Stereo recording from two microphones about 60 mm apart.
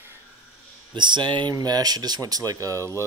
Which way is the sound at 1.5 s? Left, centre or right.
Right.